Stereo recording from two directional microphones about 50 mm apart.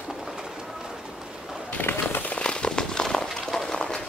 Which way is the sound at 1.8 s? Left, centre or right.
Left.